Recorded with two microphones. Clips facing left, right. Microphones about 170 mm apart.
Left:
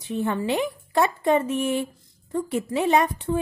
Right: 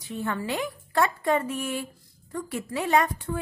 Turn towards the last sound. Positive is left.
turn(degrees=20)  # may be behind; listen again after turning